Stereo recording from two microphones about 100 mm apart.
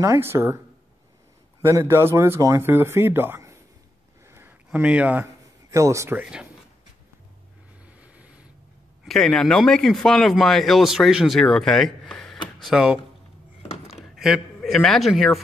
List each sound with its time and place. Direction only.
0.0 s speech: 30° right (ahead or behind)
1.6 s speech: 25° right (ahead or behind)
4.3 s a sound: 25° right (ahead or behind)
4.7 s speech: 15° right (ahead or behind)
5.2 s a sound: 30° right (ahead or behind)
7.8 s vehicle: 15° right (ahead or behind)
9.0 s a man's voice: 5° left (ahead or behind)